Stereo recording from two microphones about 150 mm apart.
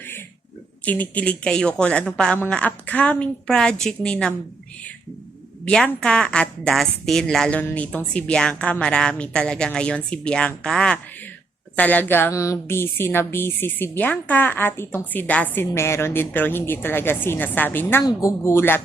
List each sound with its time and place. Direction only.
0.9 s a woman's voice: 10° left (ahead or behind)
5.6 s a woman's voice: 5° left (ahead or behind)